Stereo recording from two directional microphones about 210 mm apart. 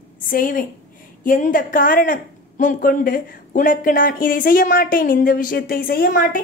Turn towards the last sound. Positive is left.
turn(degrees=40)  # may be behind; listen again after turning